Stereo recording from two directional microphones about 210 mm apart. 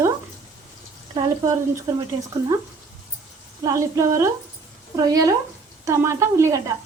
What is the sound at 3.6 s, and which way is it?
A woman's voice, 15° right (ahead or behind).